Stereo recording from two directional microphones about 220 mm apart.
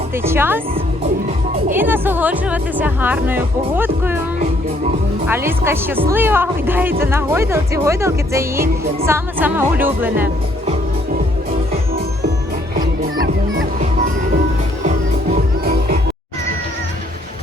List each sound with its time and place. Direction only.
0.2 s speech: 10° right (ahead or behind)
1.7 s speech: 10° right (ahead or behind)
5.3 s speech: 10° right (ahead or behind)